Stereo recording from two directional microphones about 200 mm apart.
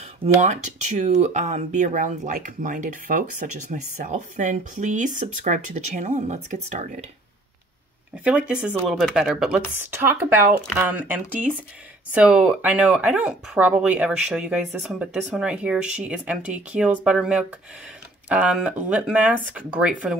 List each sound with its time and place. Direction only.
0.2 s speech: 35° right (ahead or behind)
8.2 s speech: 5° right (ahead or behind)